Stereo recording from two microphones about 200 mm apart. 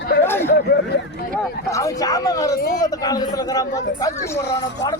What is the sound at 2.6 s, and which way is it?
Speech, 50° left (ahead or behind).